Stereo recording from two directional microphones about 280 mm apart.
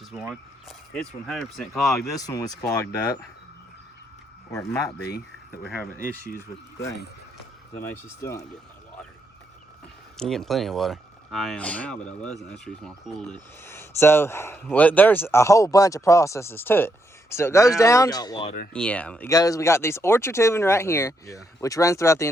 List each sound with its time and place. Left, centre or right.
0.1 s speech: centre
2.0 s speech: centre
4.5 s speech: centre
7.9 s speech: centre
10.2 s speech: centre
18.7 s speech: centre